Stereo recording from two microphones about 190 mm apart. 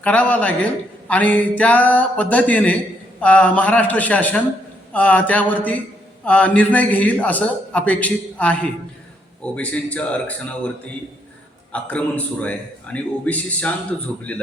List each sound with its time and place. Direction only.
0.0 s a man's voice: 10° left (ahead or behind)
11.7 s a man's voice: 5° left (ahead or behind)